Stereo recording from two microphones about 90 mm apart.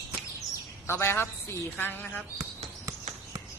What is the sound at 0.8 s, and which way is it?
A woman's voice, 30° left (ahead or behind).